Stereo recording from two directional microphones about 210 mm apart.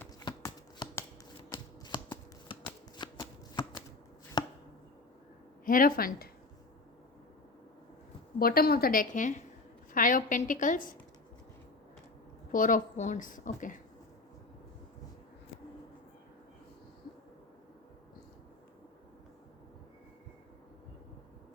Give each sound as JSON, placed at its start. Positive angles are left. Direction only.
{"t": 0.3, "sound": "shuffling cards", "side_deg": 20}
{"t": 4.4, "sound": "a sound", "side_deg": 20}
{"t": 5.6, "sound": "a woman's voice", "side_deg": 40}
{"t": 8.4, "sound": "a woman's voice", "side_deg": 45}
{"t": 12.5, "sound": "a woman's voice", "side_deg": 40}